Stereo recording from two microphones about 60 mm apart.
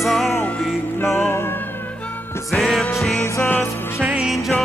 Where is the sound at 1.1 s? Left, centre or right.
Left.